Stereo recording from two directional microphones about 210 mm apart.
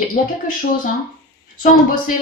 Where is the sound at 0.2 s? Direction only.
40° left (ahead or behind).